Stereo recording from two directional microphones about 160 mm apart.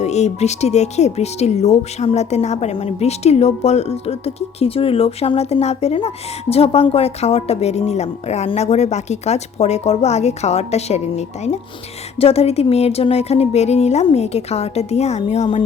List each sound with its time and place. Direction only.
0.0 s speech: 45° left (ahead or behind)